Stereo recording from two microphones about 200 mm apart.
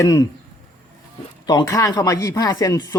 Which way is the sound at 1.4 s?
20° left (ahead or behind).